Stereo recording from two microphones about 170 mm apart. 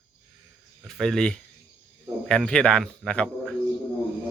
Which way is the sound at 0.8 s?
Centre (ahead or behind).